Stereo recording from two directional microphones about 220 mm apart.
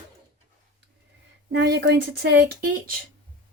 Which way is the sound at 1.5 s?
50° right (ahead or behind).